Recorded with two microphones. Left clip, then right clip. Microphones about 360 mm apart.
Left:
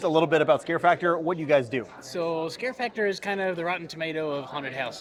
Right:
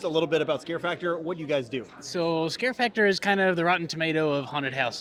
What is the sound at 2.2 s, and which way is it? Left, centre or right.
Speech, right.